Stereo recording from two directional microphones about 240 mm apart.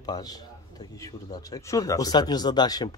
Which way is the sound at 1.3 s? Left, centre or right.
Centre.